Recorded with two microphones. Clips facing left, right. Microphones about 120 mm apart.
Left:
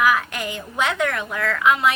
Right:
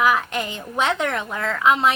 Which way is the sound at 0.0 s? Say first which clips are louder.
Even; 25° right (ahead or behind).